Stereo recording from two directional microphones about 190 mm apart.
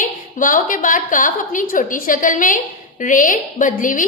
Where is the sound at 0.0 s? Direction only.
45° left (ahead or behind).